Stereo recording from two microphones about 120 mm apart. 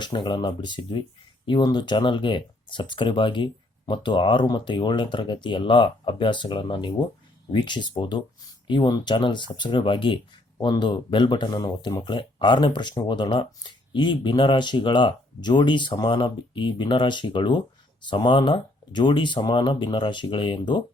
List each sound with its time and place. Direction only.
0.0 s speech: 40° left (ahead or behind)